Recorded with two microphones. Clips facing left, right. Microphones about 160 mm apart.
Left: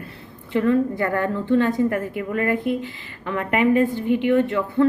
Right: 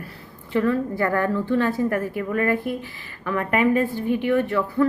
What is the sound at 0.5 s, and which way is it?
A woman's voice, 20° left (ahead or behind).